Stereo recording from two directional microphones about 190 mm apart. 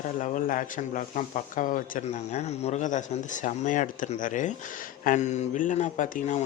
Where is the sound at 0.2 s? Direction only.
45° left (ahead or behind).